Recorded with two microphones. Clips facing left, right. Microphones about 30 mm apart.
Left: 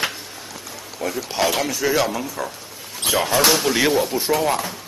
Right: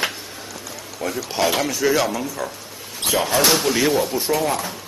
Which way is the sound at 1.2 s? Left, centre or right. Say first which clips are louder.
Right 1 dB; centre.